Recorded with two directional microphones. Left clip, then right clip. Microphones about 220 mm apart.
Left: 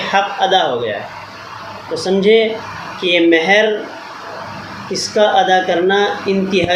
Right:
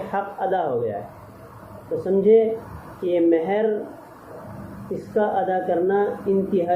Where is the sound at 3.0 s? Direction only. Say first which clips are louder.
Left 7 dB; 15° left (ahead or behind).